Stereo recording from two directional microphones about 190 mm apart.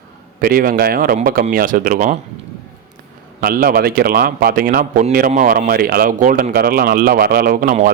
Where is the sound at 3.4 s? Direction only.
50° right (ahead or behind).